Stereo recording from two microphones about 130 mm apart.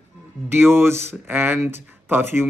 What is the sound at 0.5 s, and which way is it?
A man's voice, 20° right (ahead or behind).